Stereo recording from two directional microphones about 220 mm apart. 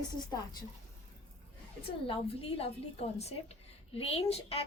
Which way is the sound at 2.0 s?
25° left (ahead or behind).